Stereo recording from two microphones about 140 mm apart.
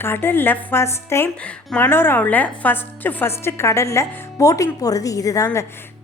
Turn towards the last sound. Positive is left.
turn(degrees=25)  # may be behind; listen again after turning